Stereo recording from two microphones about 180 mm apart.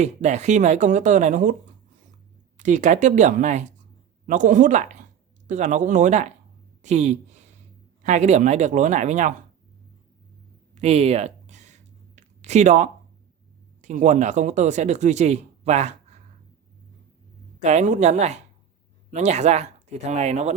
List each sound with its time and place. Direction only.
0.0 s speech: 40° right (ahead or behind)
2.6 s speech: 45° right (ahead or behind)
10.8 s a sound: 35° right (ahead or behind)
13.8 s speech: 45° right (ahead or behind)
17.6 s speech: 40° right (ahead or behind)